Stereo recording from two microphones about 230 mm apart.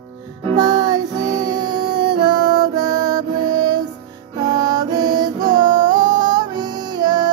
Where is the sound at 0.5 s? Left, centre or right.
Centre.